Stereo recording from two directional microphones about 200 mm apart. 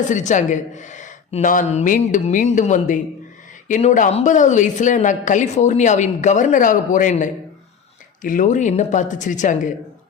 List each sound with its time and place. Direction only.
0.1 s a woman's voice: 35° left (ahead or behind)